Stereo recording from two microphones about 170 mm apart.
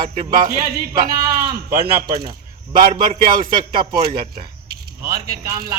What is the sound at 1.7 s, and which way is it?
Speech, 20° right (ahead or behind).